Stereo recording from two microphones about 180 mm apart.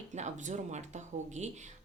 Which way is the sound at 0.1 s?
40° right (ahead or behind).